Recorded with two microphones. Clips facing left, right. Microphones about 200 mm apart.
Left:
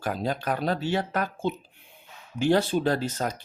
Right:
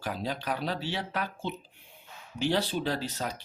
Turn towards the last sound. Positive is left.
turn(degrees=45)  # may be behind; listen again after turning